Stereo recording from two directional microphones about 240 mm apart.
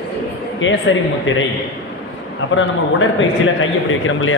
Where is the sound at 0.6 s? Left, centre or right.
Left.